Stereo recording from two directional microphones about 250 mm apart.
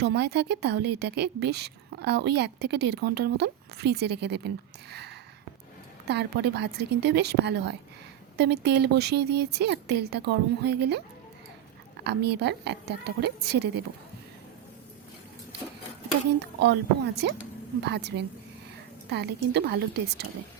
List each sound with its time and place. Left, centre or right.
0.0 s a woman's voice: right
12.0 s a woman's voice: right
16.6 s a woman's voice: right